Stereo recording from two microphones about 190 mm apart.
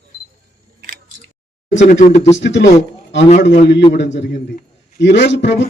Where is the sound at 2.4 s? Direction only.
70° left (ahead or behind).